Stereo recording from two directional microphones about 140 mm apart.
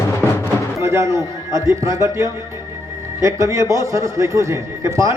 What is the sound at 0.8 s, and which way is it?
A man's voice, 20° right (ahead or behind).